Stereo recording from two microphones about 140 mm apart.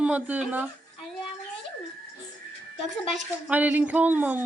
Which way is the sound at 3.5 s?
10° right (ahead or behind).